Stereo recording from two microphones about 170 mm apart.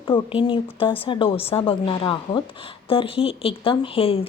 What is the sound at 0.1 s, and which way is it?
Speech, 30° left (ahead or behind).